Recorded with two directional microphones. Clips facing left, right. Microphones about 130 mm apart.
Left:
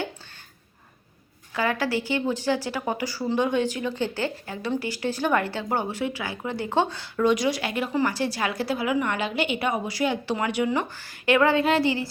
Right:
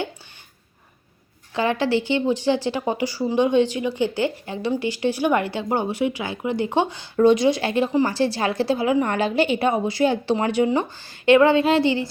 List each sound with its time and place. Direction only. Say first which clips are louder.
1.5 s a woman's voice: right 4 dB; 25° right (ahead or behind)
7.2 s a woman's voice: right 6 dB; 30° right (ahead or behind)